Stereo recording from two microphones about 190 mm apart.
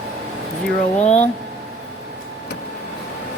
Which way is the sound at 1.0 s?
35° left (ahead or behind).